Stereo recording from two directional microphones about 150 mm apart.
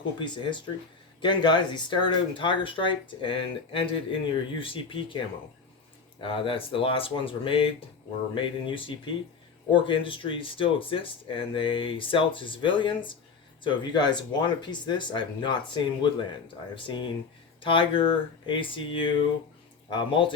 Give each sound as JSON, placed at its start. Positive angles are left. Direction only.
{"t": 0.2, "sound": "speech", "side_deg": 30}